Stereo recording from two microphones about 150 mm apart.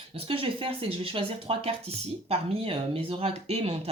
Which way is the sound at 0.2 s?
35° right (ahead or behind).